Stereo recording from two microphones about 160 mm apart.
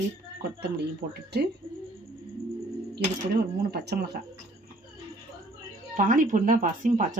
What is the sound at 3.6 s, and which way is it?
Speech, 75° right (ahead or behind).